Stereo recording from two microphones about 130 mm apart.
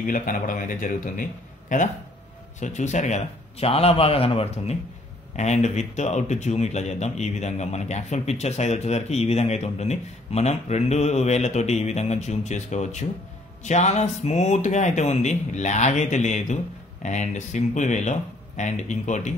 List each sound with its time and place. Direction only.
0.0 s a man's voice: 90° left
2.6 s a man's voice: 65° left (ahead or behind)